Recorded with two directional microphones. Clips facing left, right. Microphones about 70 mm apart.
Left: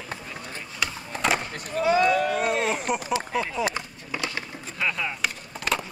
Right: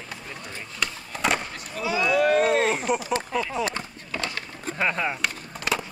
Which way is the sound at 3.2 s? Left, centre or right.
Centre.